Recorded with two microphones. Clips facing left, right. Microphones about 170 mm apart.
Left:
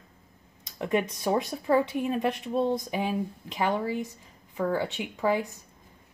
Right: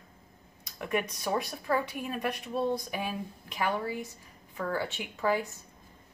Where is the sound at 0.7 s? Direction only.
25° left (ahead or behind).